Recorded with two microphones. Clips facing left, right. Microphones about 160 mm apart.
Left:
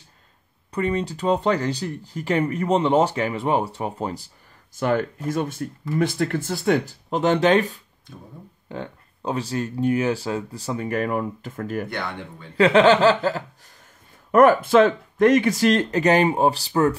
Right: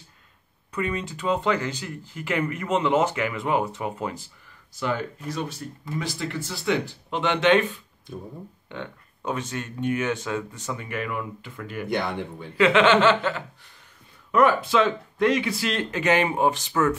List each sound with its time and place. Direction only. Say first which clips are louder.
0.7 s speech: left 5 dB; 35° left (ahead or behind)
14.3 s speech: left 5 dB; 50° left (ahead or behind); by 16.9 s 35° left (ahead or behind)